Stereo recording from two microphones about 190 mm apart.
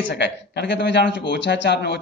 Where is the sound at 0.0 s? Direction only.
65° left (ahead or behind).